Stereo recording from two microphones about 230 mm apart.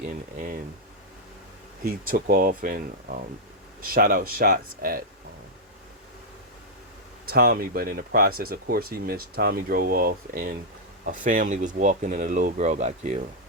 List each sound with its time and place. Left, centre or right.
0.0 s speech: right
1.8 s speech: right
7.3 s speech: right